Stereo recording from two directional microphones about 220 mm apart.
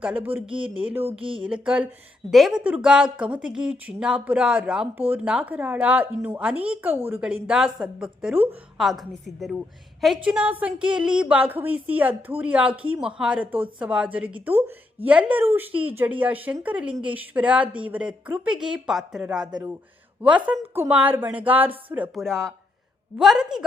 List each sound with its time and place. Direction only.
0.0 s a woman's voice: 5° right (ahead or behind)
0.4 s speech: 25° right (ahead or behind)
1.5 s a woman's voice: 5° right (ahead or behind)